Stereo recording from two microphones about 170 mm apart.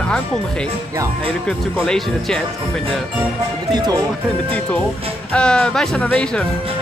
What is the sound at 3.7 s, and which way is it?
Music, 25° right (ahead or behind).